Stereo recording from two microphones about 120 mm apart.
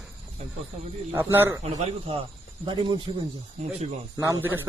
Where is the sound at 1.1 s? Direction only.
20° right (ahead or behind).